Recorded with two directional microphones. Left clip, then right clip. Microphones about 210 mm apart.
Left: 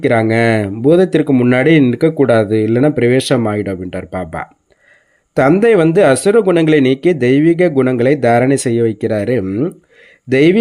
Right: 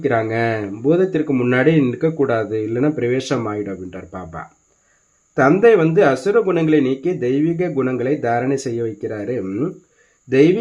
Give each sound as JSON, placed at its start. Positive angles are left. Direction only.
{"t": 0.0, "sound": "speech", "side_deg": 40}